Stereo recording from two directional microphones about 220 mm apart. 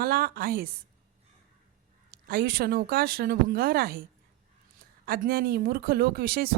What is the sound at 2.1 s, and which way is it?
Speech, 45° right (ahead or behind).